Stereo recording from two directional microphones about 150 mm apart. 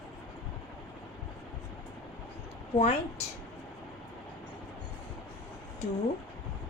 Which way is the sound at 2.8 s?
45° left (ahead or behind).